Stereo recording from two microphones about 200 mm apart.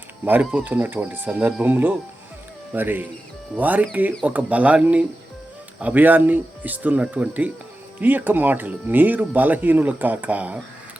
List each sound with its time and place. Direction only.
0.3 s speech: 10° right (ahead or behind)